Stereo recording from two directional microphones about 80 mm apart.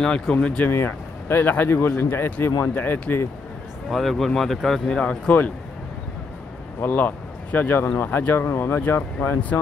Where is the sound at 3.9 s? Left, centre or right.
Centre.